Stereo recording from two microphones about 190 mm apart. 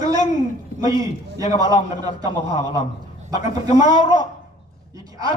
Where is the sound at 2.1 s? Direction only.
35° left (ahead or behind).